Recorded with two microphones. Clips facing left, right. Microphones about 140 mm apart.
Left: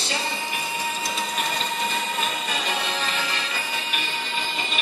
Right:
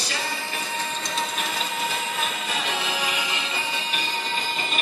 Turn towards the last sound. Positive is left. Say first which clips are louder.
# even
turn(degrees=-5)  # may be behind; listen again after turning